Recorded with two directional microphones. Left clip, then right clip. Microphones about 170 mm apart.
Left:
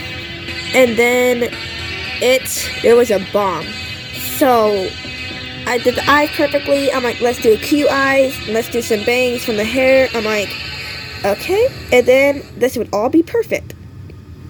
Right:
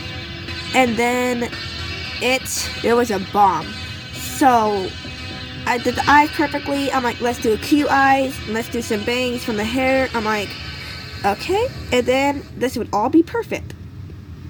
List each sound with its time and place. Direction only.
0.7 s a woman's voice: 20° left (ahead or behind)